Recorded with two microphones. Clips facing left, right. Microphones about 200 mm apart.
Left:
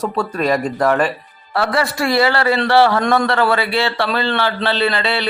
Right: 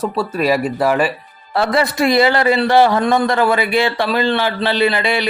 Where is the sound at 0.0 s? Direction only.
5° right (ahead or behind).